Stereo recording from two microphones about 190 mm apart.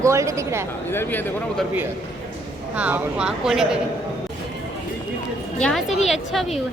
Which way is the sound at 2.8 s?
5° right (ahead or behind).